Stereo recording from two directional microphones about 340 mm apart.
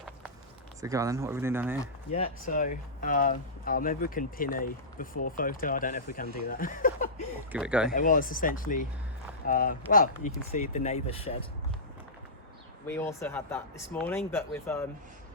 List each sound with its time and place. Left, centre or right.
0.8 s speech: centre
1.8 s speech: centre
7.5 s speech: centre
7.9 s speech: left
12.9 s speech: centre